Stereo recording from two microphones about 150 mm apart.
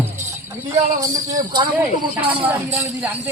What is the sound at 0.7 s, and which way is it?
Speech, 25° right (ahead or behind).